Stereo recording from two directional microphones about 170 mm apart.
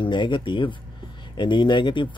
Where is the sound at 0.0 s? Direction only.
30° left (ahead or behind).